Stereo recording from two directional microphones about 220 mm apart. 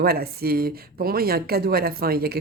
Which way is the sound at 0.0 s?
45° right (ahead or behind).